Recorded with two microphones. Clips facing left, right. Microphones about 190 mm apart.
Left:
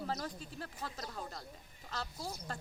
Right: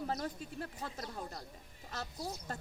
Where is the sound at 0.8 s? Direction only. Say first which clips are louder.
Right 1 dB; 25° right (ahead or behind).